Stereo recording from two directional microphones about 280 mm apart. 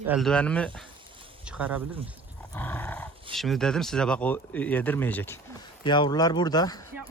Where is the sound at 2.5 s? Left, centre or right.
Centre.